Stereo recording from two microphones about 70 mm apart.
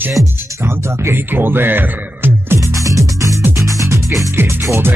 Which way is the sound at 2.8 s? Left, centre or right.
Right.